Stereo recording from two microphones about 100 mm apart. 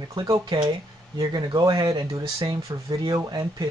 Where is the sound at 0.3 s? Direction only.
40° right (ahead or behind).